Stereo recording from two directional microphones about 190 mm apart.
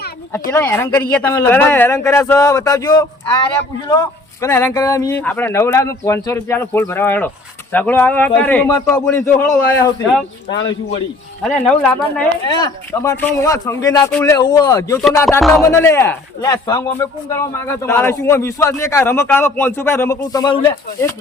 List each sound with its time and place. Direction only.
0.3 s a man's voice: 10° left (ahead or behind)
11.4 s speech: 5° left (ahead or behind)
12.5 s a man's voice: 20° left (ahead or behind)
14.1 s speech: 5° left (ahead or behind)
14.3 s a man's voice: 20° left (ahead or behind)
15.4 s speech: centre (ahead or behind)
15.6 s a man's voice: 15° left (ahead or behind)